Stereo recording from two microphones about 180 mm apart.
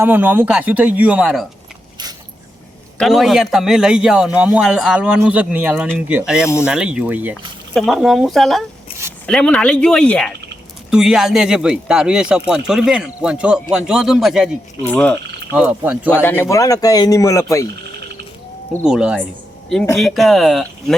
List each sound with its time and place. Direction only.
0.0 s speech: 10° right (ahead or behind)
3.0 s speech: centre (ahead or behind)
14.8 s speech: 10° left (ahead or behind)
15.5 s speech: 10° right (ahead or behind)
16.1 s speech: 10° left (ahead or behind)
18.9 s speech: 5° right (ahead or behind)